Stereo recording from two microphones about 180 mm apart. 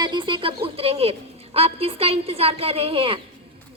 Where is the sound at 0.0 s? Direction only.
25° right (ahead or behind).